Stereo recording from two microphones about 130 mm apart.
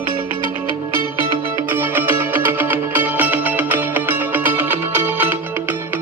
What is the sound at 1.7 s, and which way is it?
Music, 15° right (ahead or behind).